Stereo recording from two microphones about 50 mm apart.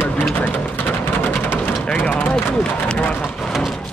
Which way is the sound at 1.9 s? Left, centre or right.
Left.